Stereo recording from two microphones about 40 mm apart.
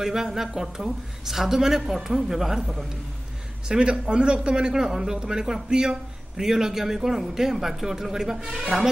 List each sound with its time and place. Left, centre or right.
0.0 s a man's voice: centre
3.6 s a man's voice: centre